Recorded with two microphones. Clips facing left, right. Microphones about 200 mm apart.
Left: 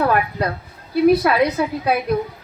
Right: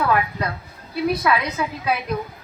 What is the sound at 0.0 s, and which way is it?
A woman's voice, 40° left (ahead or behind).